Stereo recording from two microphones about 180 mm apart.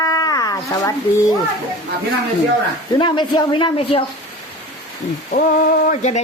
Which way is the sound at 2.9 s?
25° left (ahead or behind).